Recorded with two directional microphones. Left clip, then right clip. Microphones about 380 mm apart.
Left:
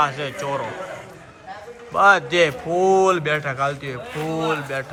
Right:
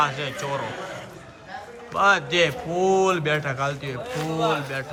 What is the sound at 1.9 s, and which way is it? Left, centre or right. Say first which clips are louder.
A man's voice: left 4 dB; centre.